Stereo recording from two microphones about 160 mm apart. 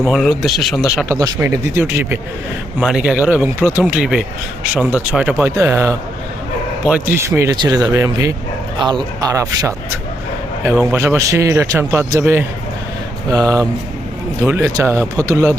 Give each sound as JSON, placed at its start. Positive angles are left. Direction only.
{"t": 0.0, "sound": "speech", "side_deg": 0}
{"t": 1.0, "sound": "speech", "side_deg": -20}